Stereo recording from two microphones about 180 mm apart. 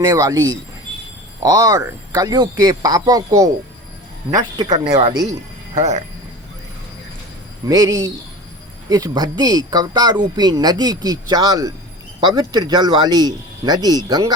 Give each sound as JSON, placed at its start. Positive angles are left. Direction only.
{"t": 0.0, "sound": "speech", "side_deg": -20}
{"t": 5.7, "sound": "speech", "side_deg": -40}
{"t": 7.6, "sound": "speech", "side_deg": -20}